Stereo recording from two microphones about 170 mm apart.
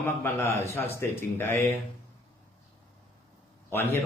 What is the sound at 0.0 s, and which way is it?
Speech, 15° left (ahead or behind).